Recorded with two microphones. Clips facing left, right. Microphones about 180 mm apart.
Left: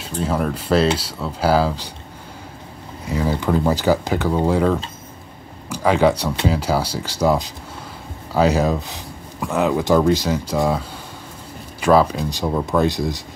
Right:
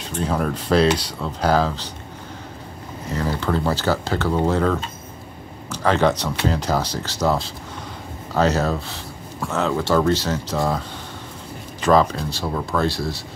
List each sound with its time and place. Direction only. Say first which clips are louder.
0.0 s speech: left 1 dB; 5° left (ahead or behind)
3.1 s speech: left 3 dB; 10° left (ahead or behind)
11.8 s speech: left 2 dB; 10° left (ahead or behind)